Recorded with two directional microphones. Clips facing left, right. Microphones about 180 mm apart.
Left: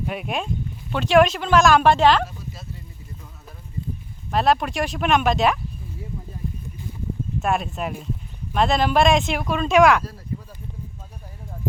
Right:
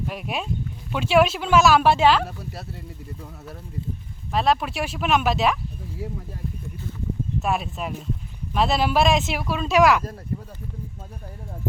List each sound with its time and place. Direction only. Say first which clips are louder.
0.0 s speech: left 2 dB; centre (ahead or behind)
2.2 s speech: right 1 dB; 65° right (ahead or behind)
4.3 s speech: left 2 dB; centre (ahead or behind)
6.0 s speech: right 5 dB; 85° right
7.4 s speech: left 3 dB; centre (ahead or behind)